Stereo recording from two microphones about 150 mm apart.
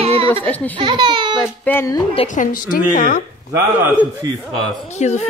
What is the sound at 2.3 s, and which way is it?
Speech, 65° left (ahead or behind).